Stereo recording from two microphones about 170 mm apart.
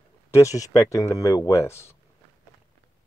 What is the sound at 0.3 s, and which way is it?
Speech, 20° left (ahead or behind).